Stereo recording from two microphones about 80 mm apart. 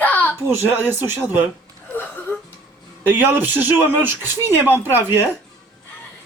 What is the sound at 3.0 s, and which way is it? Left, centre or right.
Speech, right.